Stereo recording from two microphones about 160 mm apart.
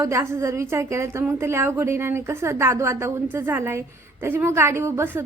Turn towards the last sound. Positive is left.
turn(degrees=-15)  # may be behind; listen again after turning